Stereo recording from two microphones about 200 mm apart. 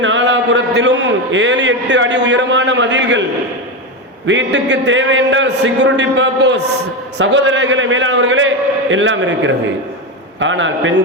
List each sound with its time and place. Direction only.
0.0 s a man's voice: 65° right (ahead or behind)
4.3 s a man's voice: 60° right (ahead or behind)